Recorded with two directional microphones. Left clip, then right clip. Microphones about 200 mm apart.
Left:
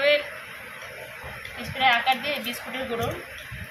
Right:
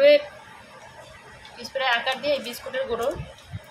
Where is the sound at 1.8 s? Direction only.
45° right (ahead or behind).